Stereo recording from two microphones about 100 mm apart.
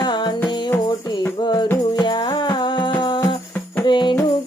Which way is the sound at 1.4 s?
50° left (ahead or behind).